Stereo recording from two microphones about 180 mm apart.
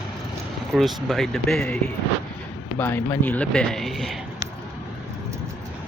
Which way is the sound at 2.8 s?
10° left (ahead or behind).